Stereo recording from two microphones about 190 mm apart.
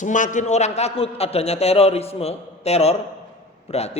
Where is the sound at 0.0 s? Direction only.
40° left (ahead or behind).